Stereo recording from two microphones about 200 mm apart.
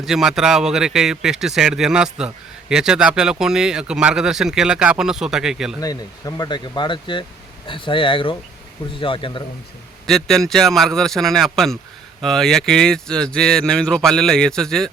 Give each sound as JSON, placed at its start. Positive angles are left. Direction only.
{"t": 0.0, "sound": "a man's voice", "side_deg": 0}
{"t": 5.8, "sound": "speech", "side_deg": 20}
{"t": 10.1, "sound": "a man's voice", "side_deg": 0}